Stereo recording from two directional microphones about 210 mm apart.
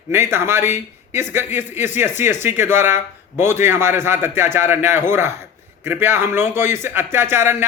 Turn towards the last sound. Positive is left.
turn(degrees=-10)  # may be behind; listen again after turning